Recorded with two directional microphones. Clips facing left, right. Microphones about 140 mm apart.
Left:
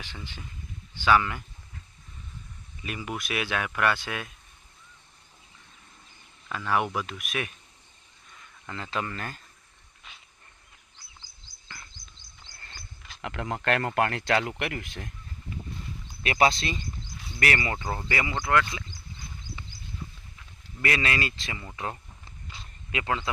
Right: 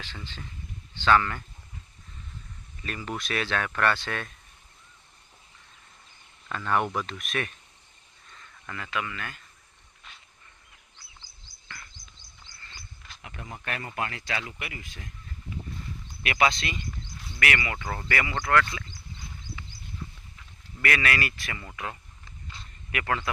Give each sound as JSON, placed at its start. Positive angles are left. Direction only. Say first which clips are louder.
{"t": 0.0, "sound": "speech", "louder": "even", "side_deg": 15}
{"t": 2.8, "sound": "speech", "louder": "even", "side_deg": 10}
{"t": 6.5, "sound": "speech", "louder": "even", "side_deg": 5}
{"t": 8.3, "sound": "a sound", "louder": "even", "side_deg": 10}
{"t": 8.7, "sound": "speech", "louder": "left 1 dB", "side_deg": 30}
{"t": 13.2, "sound": "speech", "louder": "left 10 dB", "side_deg": 75}
{"t": 16.2, "sound": "speech", "louder": "left 2 dB", "side_deg": 35}
{"t": 17.8, "sound": "speech", "louder": "even", "side_deg": 20}
{"t": 20.8, "sound": "speech", "louder": "even", "side_deg": 25}
{"t": 22.9, "sound": "a man's voice", "louder": "even", "side_deg": 20}